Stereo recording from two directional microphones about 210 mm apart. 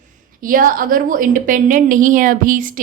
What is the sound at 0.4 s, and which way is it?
A woman's voice, 40° right (ahead or behind).